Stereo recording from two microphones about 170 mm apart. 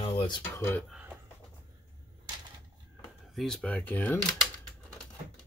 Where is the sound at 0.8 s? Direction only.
5° right (ahead or behind).